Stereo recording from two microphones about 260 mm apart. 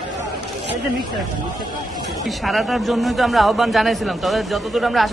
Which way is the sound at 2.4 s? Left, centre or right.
Centre.